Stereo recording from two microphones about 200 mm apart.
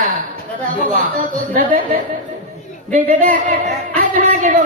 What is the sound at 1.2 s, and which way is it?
Speech, 45° right (ahead or behind).